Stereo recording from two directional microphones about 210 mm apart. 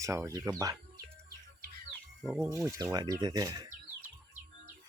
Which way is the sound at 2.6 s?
15° right (ahead or behind).